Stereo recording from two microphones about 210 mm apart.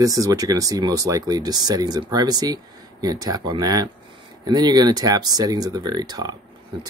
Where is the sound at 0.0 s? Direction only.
15° right (ahead or behind).